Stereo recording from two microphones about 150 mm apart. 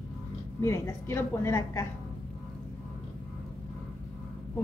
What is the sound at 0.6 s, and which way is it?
A woman's voice, 15° left (ahead or behind).